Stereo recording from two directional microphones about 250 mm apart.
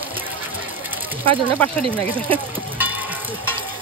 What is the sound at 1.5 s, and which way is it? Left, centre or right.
Speech, centre.